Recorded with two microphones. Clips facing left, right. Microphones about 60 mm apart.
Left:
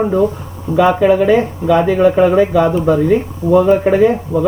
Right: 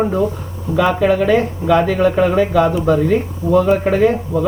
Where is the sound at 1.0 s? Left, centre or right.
Centre.